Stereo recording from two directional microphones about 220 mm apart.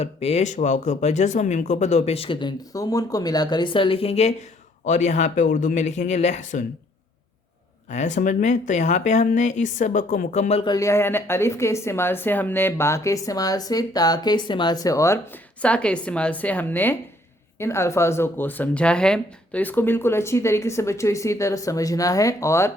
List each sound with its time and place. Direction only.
0.0 s speech: 30° left (ahead or behind)
7.9 s speech: 35° left (ahead or behind); by 22.7 s 10° left (ahead or behind)